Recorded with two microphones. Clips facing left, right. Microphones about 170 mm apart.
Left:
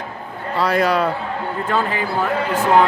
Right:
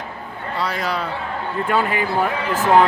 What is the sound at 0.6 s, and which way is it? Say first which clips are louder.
Speech: left 7 dB; 60° left (ahead or behind).